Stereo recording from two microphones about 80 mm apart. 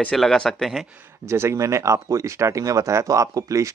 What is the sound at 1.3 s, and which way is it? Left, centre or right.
Speech, right.